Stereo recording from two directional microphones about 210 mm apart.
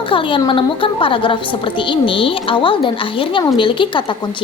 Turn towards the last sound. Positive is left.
turn(degrees=25)  # may be behind; listen again after turning